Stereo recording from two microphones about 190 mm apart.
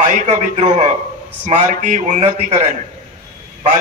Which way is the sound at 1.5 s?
45° right (ahead or behind).